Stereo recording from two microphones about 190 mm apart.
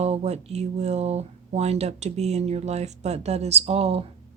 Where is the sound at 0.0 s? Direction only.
35° right (ahead or behind).